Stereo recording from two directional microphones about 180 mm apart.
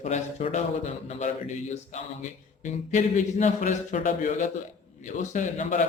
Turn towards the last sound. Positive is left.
turn(degrees=45)  # may be behind; listen again after turning